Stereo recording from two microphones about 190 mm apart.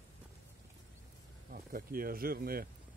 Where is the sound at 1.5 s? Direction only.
50° right (ahead or behind).